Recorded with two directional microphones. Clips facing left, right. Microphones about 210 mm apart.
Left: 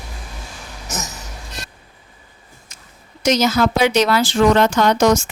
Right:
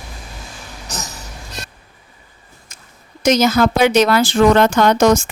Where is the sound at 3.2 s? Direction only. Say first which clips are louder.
Right 2 dB; 55° right (ahead or behind).